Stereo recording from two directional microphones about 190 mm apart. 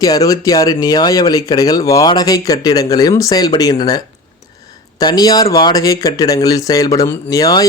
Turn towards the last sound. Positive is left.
turn(degrees=20)  # may be behind; listen again after turning